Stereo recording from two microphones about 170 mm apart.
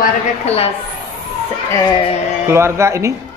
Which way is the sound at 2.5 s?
15° right (ahead or behind).